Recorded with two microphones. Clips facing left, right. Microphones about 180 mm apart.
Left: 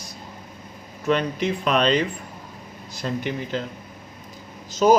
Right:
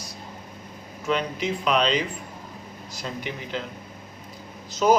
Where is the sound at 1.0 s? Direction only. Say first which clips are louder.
Left 4 dB; 55° left (ahead or behind).